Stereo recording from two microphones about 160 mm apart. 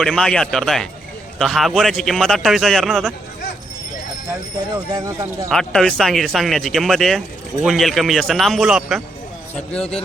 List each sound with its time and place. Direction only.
0.0 s speech: 5° left (ahead or behind)
4.7 s speech: 20° right (ahead or behind)
5.5 s a man's voice: 5° left (ahead or behind)